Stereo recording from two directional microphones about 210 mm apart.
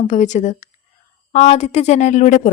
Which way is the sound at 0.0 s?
35° left (ahead or behind).